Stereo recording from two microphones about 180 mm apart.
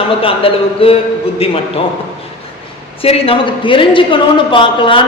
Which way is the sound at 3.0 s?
30° left (ahead or behind).